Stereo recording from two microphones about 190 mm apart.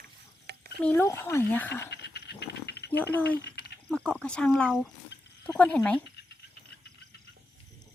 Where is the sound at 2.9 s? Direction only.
10° left (ahead or behind).